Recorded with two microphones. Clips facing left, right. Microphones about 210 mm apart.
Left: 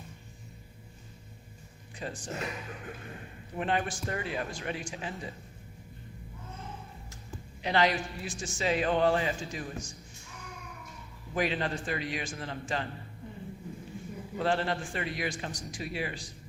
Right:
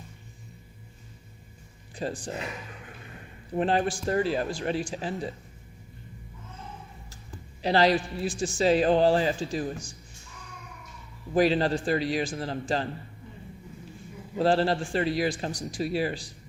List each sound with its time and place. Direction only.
2.0 s speech: 35° right (ahead or behind)
3.5 s speech: 35° right (ahead or behind)
7.6 s speech: 35° right (ahead or behind)
11.3 s speech: 35° right (ahead or behind)
14.3 s speech: 35° right (ahead or behind)